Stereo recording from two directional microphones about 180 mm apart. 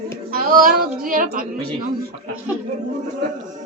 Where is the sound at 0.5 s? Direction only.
50° right (ahead or behind).